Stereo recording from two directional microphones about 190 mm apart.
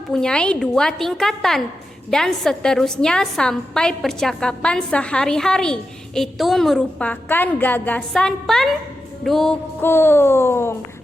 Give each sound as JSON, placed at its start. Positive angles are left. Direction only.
{"t": 0.1, "sound": "a woman's voice", "side_deg": 5}